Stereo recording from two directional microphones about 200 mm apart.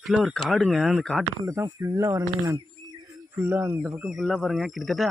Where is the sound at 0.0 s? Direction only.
Centre (ahead or behind).